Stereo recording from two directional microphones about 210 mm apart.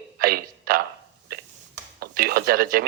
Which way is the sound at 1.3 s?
45° right (ahead or behind).